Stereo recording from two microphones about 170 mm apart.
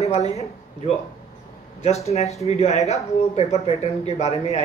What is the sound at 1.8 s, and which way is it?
Speech, 40° left (ahead or behind).